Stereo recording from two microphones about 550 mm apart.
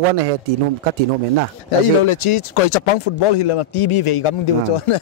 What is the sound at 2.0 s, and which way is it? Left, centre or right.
Speech, left.